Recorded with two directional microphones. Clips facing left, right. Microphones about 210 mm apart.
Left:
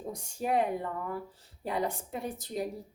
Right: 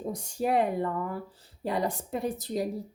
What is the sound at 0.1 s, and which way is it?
Speech, 35° right (ahead or behind).